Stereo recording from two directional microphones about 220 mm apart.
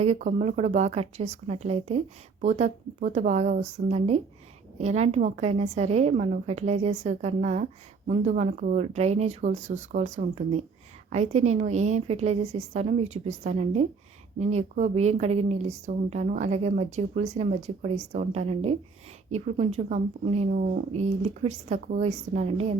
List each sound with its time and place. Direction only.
0.0 s a woman's voice: 30° right (ahead or behind)